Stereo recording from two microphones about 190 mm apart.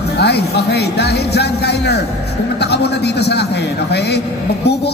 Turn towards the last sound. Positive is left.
turn(degrees=60)  # may be behind; listen again after turning